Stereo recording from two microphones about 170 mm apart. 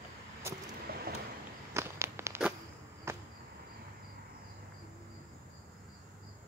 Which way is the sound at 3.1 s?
15° right (ahead or behind).